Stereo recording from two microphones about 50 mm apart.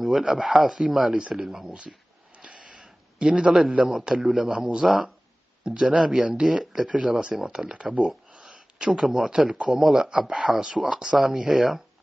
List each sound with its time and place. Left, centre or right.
0.1 s speech: centre
1.7 s a sound: centre
4.1 s speech: centre
5.7 s speech: centre
10.0 s speech: centre